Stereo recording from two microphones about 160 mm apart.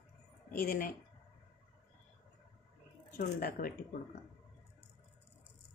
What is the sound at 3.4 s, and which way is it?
Speech, 65° left (ahead or behind).